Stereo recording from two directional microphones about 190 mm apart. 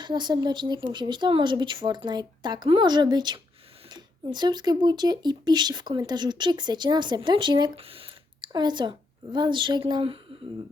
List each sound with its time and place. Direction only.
0.0 s speech: 25° right (ahead or behind)